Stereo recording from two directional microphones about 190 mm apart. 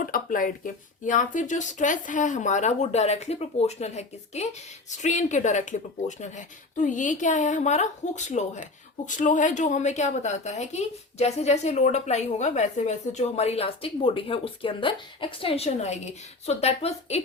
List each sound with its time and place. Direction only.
0.0 s speech: 45° left (ahead or behind)